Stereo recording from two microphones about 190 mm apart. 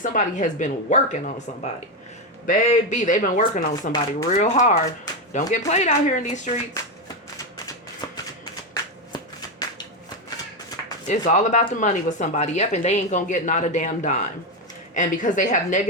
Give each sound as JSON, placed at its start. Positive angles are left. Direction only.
{"t": 0.0, "sound": "speech", "side_deg": 40}
{"t": 8.7, "sound": "a sound", "side_deg": 20}
{"t": 11.1, "sound": "speech", "side_deg": 40}